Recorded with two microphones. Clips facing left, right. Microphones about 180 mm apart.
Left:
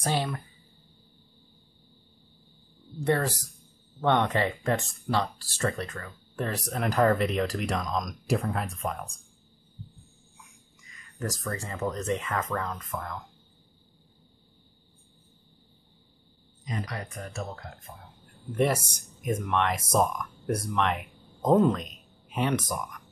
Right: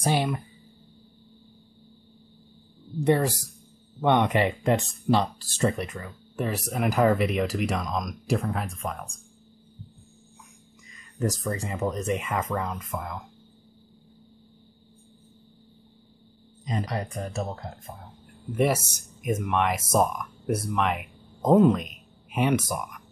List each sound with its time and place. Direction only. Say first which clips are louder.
0.0 s speech: right 4 dB; 15° right (ahead or behind)
3.0 s speech: right 4 dB; 15° right (ahead or behind)
11.1 s speech: right 5 dB; 20° right (ahead or behind)
16.6 s speech: right 5 dB; 30° right (ahead or behind)
18.5 s speech: right 2 dB; 5° right (ahead or behind)